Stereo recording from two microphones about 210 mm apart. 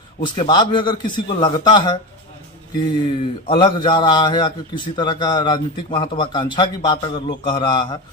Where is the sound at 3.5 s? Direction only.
20° left (ahead or behind).